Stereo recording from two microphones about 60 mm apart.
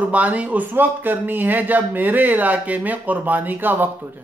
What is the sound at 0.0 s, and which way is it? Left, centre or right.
Speech, right.